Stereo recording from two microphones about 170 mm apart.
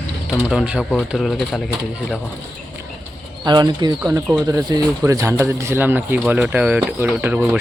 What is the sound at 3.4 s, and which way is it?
Speech, 25° right (ahead or behind).